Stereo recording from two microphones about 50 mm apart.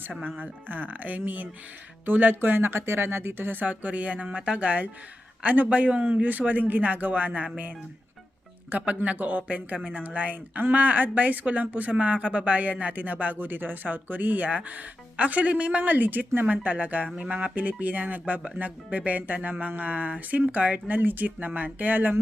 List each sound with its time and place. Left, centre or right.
0.2 s speech: right
8.7 s speech: right